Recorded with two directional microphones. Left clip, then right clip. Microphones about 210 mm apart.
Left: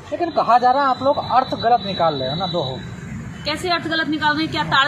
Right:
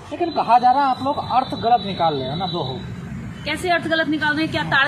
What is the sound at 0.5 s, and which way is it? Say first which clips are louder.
Speech: even; 25° left (ahead or behind).